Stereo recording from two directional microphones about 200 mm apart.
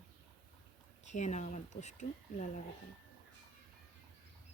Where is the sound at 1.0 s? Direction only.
35° left (ahead or behind).